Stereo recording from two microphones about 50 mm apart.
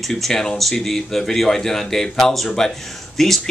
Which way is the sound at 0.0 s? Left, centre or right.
Centre.